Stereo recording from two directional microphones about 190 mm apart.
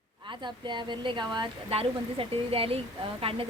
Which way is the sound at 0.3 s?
25° right (ahead or behind).